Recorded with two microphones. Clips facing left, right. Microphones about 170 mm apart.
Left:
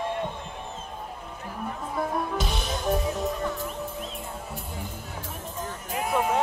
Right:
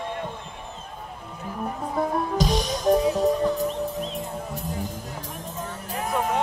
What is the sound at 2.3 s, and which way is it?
Music, 40° right (ahead or behind).